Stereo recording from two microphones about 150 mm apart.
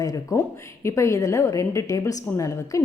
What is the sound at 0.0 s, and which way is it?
A woman's voice, 25° left (ahead or behind).